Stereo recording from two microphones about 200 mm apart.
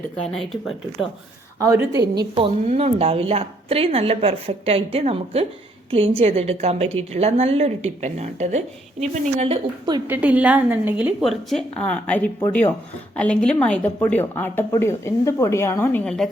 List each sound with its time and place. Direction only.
0.3 s a woman's voice: centre (ahead or behind)
1.5 s a woman's voice: 15° right (ahead or behind)
2.3 s a woman's voice: 30° right (ahead or behind)
10.1 s a woman's voice: 5° right (ahead or behind)